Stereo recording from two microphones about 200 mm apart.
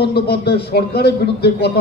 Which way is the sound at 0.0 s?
55° left (ahead or behind).